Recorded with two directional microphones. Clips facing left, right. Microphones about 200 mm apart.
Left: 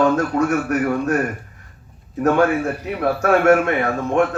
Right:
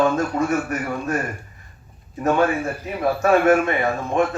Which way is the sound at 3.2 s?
75° left (ahead or behind).